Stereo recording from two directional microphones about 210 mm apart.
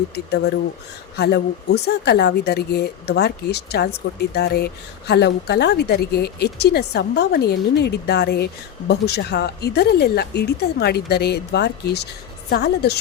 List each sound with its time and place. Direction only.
0.1 s speech: 50° left (ahead or behind)